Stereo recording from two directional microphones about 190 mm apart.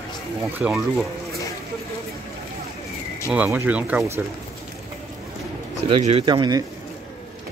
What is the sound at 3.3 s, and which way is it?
Speech, 10° right (ahead or behind).